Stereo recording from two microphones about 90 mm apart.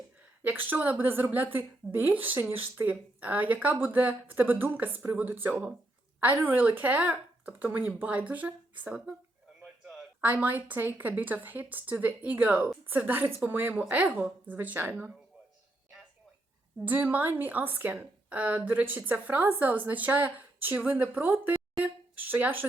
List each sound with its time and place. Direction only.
0.4 s a woman's voice: 20° right (ahead or behind)
10.2 s a woman's voice: 20° right (ahead or behind)
16.8 s a woman's voice: 15° right (ahead or behind)